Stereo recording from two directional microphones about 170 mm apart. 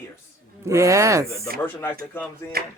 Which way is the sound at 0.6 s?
15° right (ahead or behind).